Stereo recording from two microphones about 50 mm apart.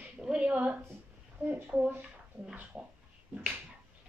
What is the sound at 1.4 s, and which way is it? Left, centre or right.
Speech, right.